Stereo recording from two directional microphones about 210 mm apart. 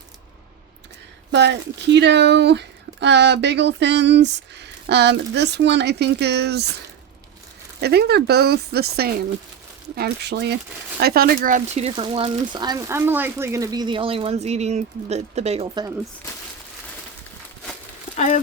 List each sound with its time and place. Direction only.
1.3 s speech: 55° right (ahead or behind)
7.8 s speech: 50° right (ahead or behind); by 15.9 s 20° right (ahead or behind)
18.1 s a sound: 30° left (ahead or behind)